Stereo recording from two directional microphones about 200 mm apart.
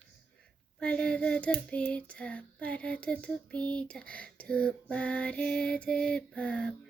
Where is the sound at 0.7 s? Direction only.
5° left (ahead or behind).